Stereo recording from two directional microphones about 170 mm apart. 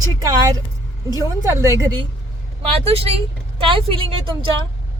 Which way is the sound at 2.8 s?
35° right (ahead or behind).